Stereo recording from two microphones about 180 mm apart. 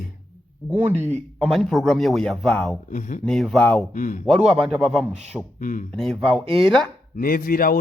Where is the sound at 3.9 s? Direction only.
45° left (ahead or behind).